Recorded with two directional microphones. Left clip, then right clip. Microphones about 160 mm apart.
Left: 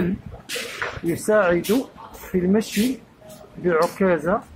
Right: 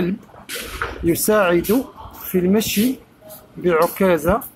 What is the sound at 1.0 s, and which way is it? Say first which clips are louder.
Speech: right 2 dB; 10° right (ahead or behind).